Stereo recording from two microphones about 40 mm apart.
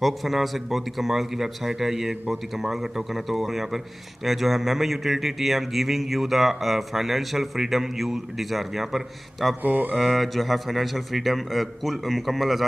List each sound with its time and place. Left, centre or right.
0.0 s a man's voice: centre
9.6 s mantra: right
9.9 s a man's voice: centre